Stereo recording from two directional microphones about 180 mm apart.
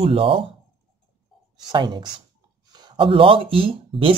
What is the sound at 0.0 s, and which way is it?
Speech, 30° right (ahead or behind).